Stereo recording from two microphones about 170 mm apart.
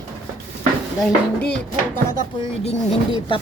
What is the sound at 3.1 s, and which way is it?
Speech, 30° left (ahead or behind).